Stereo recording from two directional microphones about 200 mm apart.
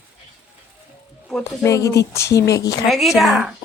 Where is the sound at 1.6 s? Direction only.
15° left (ahead or behind).